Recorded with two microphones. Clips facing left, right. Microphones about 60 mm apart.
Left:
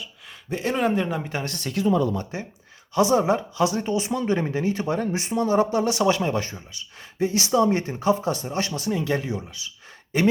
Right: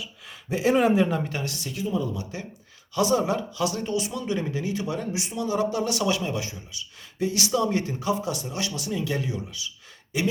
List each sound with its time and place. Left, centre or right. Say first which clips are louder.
0.5 s speech: right 3 dB; centre
1.5 s speech: left 7 dB; left
2.9 s speech: left 3 dB; left